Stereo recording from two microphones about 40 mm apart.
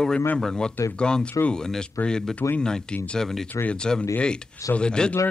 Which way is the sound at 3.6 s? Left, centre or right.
Left.